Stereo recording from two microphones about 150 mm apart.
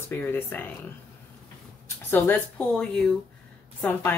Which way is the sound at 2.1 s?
10° left (ahead or behind).